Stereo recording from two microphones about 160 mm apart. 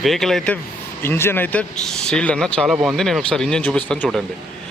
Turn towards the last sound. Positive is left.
turn(degrees=5)  # may be behind; listen again after turning